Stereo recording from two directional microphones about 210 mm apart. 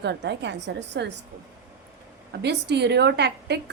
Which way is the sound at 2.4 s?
55° right (ahead or behind).